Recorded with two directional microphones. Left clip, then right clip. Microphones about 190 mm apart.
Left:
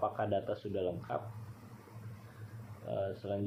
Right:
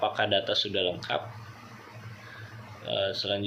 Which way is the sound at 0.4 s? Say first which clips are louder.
Right 11 dB; 65° right (ahead or behind).